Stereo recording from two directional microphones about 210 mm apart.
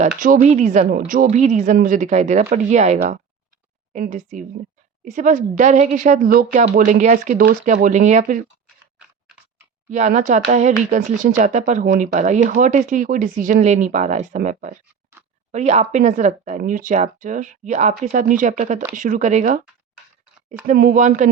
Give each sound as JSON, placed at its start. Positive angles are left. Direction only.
{"t": 0.2, "sound": "speech", "side_deg": -40}
{"t": 9.9, "sound": "speech", "side_deg": -35}
{"t": 20.7, "sound": "speech", "side_deg": -45}